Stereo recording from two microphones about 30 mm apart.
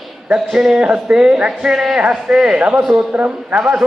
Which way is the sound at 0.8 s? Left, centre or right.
Right.